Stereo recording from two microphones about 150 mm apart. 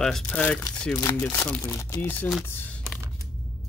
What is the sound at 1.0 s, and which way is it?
Speech, 15° left (ahead or behind).